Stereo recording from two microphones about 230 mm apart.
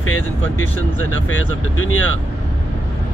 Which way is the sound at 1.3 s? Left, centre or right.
Left.